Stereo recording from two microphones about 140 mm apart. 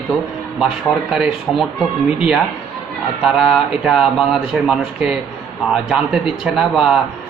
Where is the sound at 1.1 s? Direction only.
5° right (ahead or behind).